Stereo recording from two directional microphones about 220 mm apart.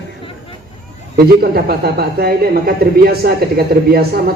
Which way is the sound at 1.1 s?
45° right (ahead or behind).